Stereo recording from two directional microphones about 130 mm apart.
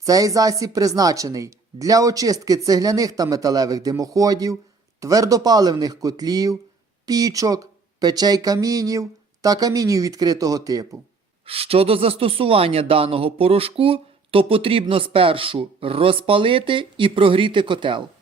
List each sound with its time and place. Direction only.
0.0 s speech: 25° right (ahead or behind)
11.4 s speech: 50° right (ahead or behind)